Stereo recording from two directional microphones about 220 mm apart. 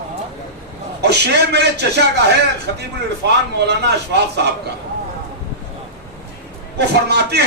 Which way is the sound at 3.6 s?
50° right (ahead or behind).